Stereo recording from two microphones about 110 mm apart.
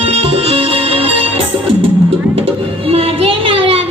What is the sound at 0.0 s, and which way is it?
Music, 60° right (ahead or behind).